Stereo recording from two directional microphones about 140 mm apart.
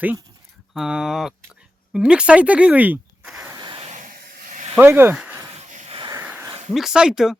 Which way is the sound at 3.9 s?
65° right (ahead or behind).